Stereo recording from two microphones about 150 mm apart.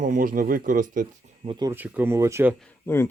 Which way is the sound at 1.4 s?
30° right (ahead or behind).